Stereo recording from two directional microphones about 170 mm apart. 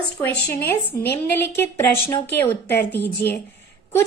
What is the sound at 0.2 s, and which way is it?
A woman's voice, 10° left (ahead or behind).